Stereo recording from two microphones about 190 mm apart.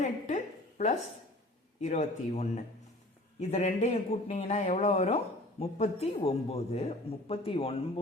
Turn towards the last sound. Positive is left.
turn(degrees=30)  # may be behind; listen again after turning